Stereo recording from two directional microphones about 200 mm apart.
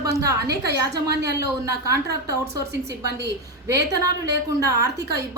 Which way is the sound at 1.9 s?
15° right (ahead or behind).